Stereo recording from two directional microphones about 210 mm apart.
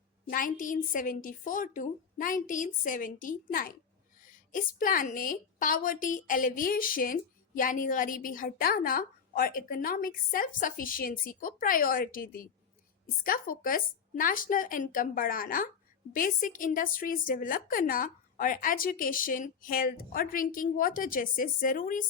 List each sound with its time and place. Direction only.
0.3 s a woman's voice: 40° left (ahead or behind)